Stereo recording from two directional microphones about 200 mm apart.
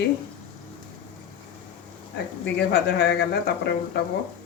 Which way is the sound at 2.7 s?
55° left (ahead or behind).